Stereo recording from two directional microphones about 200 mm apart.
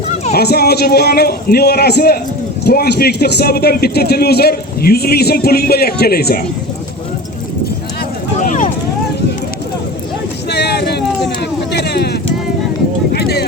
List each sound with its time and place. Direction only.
0.3 s a man's voice: 50° left (ahead or behind)
8.4 s vehicle: 40° left (ahead or behind)
10.5 s a sound: 55° left (ahead or behind)